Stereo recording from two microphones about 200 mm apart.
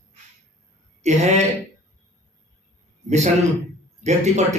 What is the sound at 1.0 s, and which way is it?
Speech, 35° right (ahead or behind).